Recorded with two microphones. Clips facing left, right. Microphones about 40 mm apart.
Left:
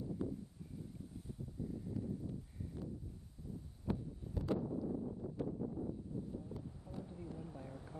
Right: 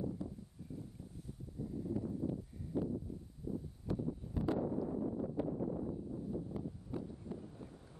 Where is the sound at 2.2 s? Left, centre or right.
Right.